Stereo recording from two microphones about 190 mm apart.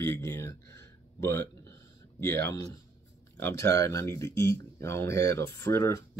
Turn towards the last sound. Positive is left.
turn(degrees=15)  # may be behind; listen again after turning